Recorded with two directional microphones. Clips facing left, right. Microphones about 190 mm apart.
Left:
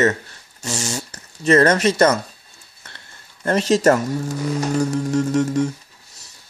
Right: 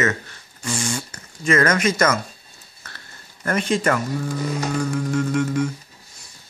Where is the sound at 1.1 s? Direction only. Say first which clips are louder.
Left 7 dB; 35° left (ahead or behind).